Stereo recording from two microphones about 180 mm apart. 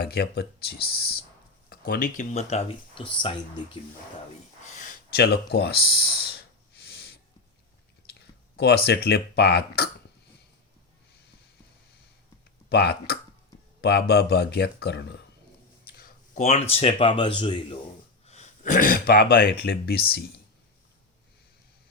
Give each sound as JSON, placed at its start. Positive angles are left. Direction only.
{"t": 0.0, "sound": "speech", "side_deg": 65}
{"t": 4.8, "sound": "speech", "side_deg": 55}
{"t": 6.7, "sound": "snort", "side_deg": 60}
{"t": 8.5, "sound": "speech", "side_deg": 65}
{"t": 12.6, "sound": "speech", "side_deg": 60}
{"t": 15.9, "sound": "a sound", "side_deg": 55}
{"t": 16.4, "sound": "speech", "side_deg": 35}
{"t": 18.3, "sound": "speech", "side_deg": 40}